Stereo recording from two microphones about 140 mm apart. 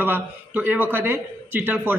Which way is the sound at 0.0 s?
15° right (ahead or behind).